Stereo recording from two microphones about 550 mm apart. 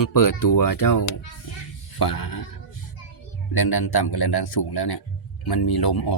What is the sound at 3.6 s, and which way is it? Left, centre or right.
Speech, left.